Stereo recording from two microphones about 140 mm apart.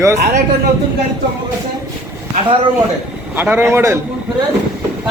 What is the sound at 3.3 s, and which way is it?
Speech, 15° right (ahead or behind).